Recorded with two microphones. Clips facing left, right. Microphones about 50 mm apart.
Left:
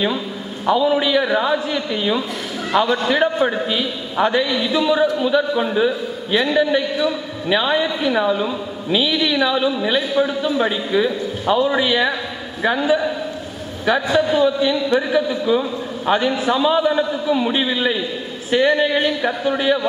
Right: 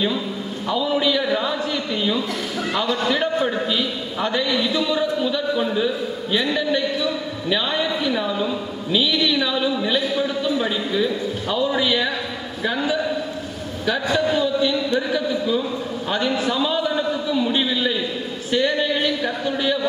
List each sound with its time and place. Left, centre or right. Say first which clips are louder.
0.7 s a man's voice: left 4 dB; left
4.5 s a man's voice: left 3 dB; centre